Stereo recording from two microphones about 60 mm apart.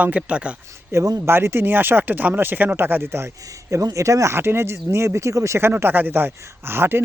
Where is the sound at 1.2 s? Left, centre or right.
Right.